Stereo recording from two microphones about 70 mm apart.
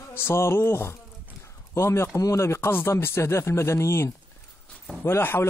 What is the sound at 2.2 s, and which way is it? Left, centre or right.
Speech, left.